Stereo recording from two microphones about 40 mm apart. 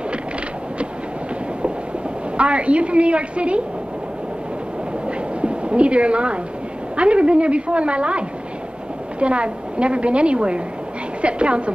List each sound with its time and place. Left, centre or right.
2.3 s a woman's voice: right
5.0 s a sound: right
7.0 s a woman's voice: right